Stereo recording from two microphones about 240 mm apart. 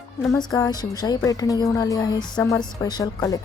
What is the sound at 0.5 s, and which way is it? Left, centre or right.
A woman's voice, centre.